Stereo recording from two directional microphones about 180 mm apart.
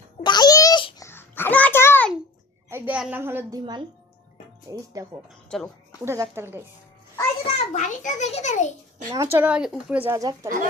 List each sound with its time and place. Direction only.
0.2 s babbling: 25° left (ahead or behind)
1.0 s a sound: 10° left (ahead or behind)
2.6 s a woman's voice: 10° right (ahead or behind)
4.7 s speech: 20° right (ahead or behind)
5.5 s speech: 5° left (ahead or behind)
6.1 s speech: 15° right (ahead or behind)
7.4 s a child's voice: 40° left (ahead or behind)
9.1 s speech: 15° right (ahead or behind)